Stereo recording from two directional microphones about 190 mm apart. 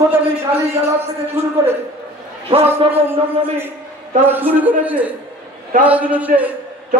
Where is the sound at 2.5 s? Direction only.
30° right (ahead or behind).